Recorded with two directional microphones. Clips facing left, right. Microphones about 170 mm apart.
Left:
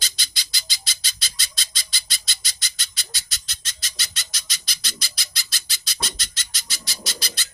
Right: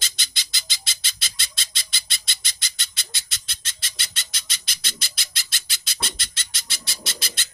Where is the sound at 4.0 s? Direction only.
25° right (ahead or behind).